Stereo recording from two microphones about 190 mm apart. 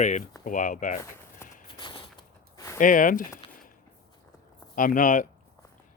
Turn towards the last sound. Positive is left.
turn(degrees=45)  # may be behind; listen again after turning